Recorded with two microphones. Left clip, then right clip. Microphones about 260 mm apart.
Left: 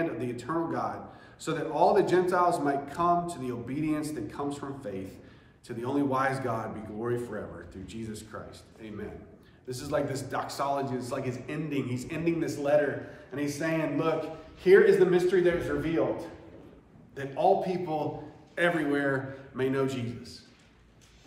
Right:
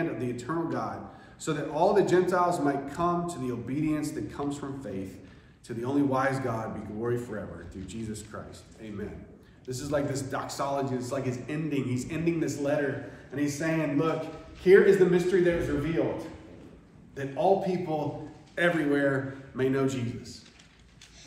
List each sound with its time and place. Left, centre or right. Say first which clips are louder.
0.0 s a man's voice: even; centre